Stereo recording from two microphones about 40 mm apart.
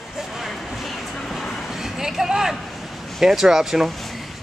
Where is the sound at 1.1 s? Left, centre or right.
Centre.